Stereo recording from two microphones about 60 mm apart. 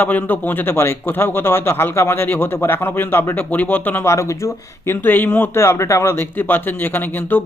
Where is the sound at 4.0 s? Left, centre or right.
Left.